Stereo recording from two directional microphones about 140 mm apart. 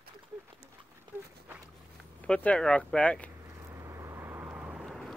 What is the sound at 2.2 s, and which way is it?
Speech, 10° left (ahead or behind).